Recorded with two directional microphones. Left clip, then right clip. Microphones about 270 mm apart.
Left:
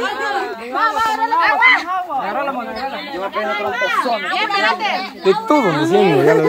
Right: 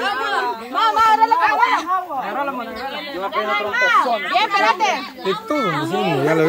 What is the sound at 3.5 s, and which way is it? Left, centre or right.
Speech, right.